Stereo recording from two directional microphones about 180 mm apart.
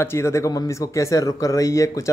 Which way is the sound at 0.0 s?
15° left (ahead or behind).